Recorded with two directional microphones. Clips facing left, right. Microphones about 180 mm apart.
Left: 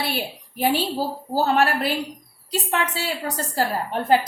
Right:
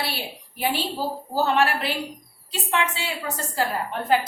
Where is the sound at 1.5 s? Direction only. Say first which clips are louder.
Left 2 dB; 40° left (ahead or behind).